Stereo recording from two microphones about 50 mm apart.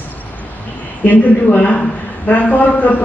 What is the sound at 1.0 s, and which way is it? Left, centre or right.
A man's voice, left.